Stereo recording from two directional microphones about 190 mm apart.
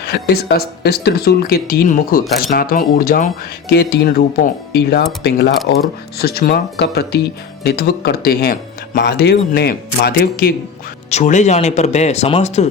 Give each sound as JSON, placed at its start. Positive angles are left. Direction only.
{"t": 0.1, "sound": "speech", "side_deg": 55}
{"t": 11.1, "sound": "speech", "side_deg": 40}